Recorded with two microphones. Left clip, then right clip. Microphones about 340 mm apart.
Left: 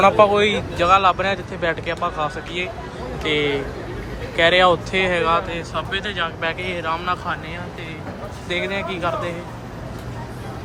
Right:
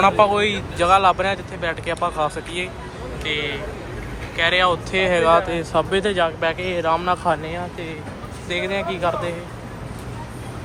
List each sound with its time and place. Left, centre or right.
0.0 s speech: centre